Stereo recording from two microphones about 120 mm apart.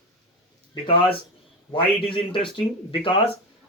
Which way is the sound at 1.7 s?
45° left (ahead or behind).